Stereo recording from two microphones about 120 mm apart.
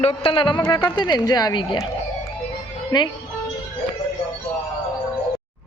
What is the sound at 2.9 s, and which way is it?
Speech, 35° left (ahead or behind).